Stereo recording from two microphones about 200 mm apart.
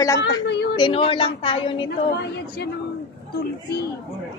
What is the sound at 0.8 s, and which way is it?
Speech, 25° left (ahead or behind).